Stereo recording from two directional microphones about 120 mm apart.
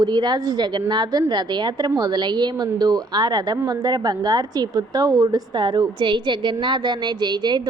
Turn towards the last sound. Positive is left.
turn(degrees=-35)  # may be behind; listen again after turning